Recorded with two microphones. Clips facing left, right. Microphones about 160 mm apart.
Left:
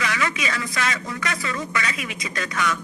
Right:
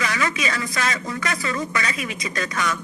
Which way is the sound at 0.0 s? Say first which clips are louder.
Right 1 dB; 35° right (ahead or behind).